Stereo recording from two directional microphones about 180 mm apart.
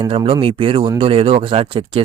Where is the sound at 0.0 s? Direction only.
30° right (ahead or behind).